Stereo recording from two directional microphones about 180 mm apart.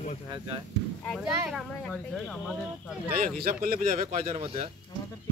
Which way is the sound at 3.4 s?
55° right (ahead or behind).